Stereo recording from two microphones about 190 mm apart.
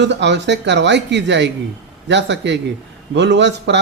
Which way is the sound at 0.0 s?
65° right (ahead or behind).